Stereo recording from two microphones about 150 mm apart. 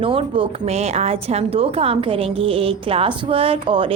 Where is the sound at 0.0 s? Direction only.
35° right (ahead or behind).